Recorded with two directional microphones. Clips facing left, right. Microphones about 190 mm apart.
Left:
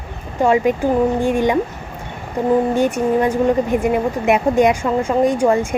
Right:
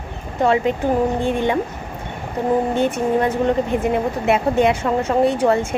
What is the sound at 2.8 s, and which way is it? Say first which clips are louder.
Speech: left 2 dB; 15° left (ahead or behind).